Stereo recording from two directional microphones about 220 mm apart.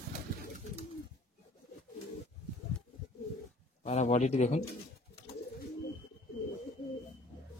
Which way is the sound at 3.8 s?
30° left (ahead or behind).